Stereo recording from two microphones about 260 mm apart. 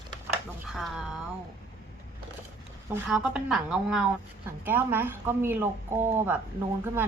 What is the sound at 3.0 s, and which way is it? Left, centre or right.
A woman's voice, centre.